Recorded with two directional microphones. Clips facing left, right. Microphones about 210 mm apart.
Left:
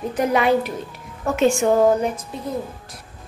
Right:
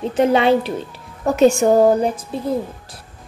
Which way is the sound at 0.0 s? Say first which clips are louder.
Right 4 dB; 25° right (ahead or behind).